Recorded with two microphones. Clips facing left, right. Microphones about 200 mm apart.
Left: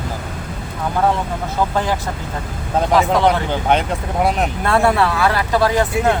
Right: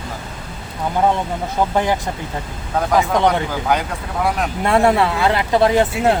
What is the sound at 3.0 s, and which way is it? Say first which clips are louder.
Speech: even; 20° right (ahead or behind).